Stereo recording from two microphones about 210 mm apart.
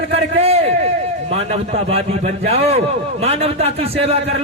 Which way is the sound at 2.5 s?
30° right (ahead or behind).